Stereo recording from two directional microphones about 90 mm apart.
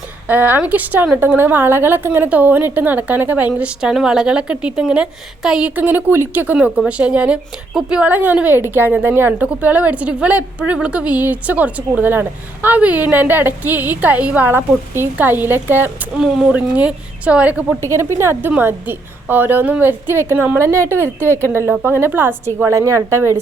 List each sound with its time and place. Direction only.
0.3 s a woman's voice: 20° right (ahead or behind)
16.1 s a woman's voice: 10° right (ahead or behind)
17.7 s a woman's voice: 30° right (ahead or behind)